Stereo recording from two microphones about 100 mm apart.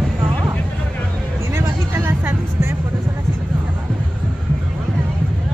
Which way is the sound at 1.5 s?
20° right (ahead or behind).